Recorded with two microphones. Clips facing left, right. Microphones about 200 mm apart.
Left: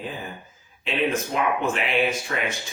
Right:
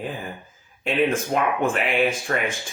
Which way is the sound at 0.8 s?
50° right (ahead or behind).